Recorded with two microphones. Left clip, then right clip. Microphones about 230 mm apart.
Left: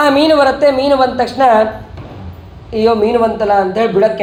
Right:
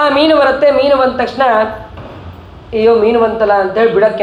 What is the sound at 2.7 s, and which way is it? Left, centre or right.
A man's voice, left.